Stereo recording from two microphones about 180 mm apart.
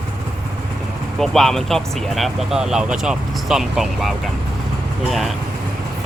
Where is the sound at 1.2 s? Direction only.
Centre (ahead or behind).